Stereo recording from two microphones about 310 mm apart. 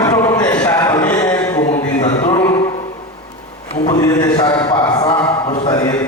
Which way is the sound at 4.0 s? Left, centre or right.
Centre.